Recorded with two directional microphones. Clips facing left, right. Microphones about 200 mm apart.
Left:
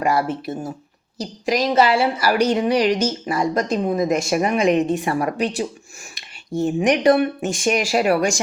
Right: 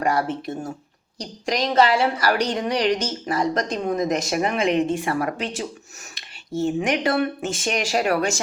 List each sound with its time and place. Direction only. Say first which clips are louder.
0.0 s a woman's voice: left 2 dB; 10° left (ahead or behind)